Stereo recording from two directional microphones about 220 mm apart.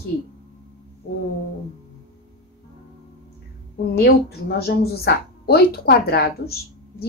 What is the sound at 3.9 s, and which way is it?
Speech, 45° left (ahead or behind).